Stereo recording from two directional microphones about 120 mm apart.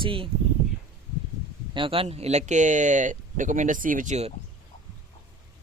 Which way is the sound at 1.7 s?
45° right (ahead or behind).